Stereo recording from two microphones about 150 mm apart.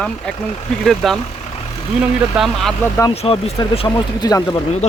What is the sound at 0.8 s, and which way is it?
Speech, centre (ahead or behind).